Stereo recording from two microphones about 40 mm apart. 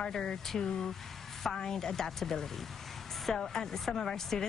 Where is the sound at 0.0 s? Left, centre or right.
Centre.